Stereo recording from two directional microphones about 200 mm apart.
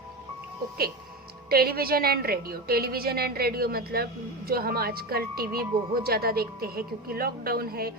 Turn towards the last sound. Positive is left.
turn(degrees=-50)  # may be behind; listen again after turning